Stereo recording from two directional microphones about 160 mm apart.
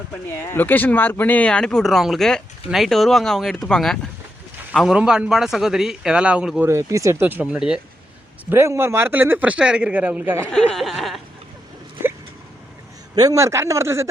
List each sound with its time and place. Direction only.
0.5 s speech: 10° left (ahead or behind); by 6.7 s 5° right (ahead or behind)
6.7 s speech: 20° right (ahead or behind)
10.7 s speech: centre (ahead or behind)
12.0 s a sound: 15° right (ahead or behind)
13.1 s speech: 20° right (ahead or behind)